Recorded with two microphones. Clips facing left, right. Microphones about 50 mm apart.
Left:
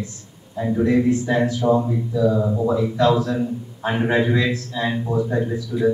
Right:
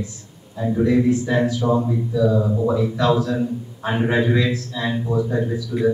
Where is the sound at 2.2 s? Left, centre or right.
Centre.